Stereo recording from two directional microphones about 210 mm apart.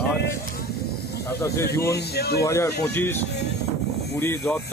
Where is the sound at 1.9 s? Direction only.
50° left (ahead or behind).